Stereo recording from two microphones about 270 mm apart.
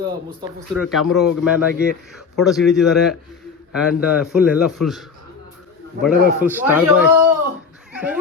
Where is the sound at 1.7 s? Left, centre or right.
Left.